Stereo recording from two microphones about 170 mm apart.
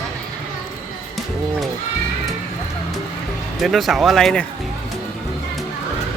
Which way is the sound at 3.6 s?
Centre (ahead or behind).